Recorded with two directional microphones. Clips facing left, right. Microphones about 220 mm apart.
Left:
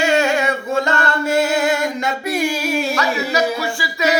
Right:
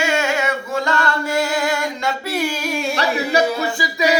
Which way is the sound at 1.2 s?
25° left (ahead or behind).